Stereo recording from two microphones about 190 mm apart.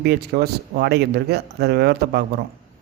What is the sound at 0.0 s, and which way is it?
Speech, 60° right (ahead or behind).